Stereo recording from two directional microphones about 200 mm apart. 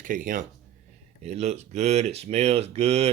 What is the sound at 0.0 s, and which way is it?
Speech, 45° right (ahead or behind).